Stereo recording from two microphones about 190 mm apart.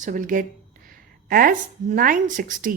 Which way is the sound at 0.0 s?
40° right (ahead or behind).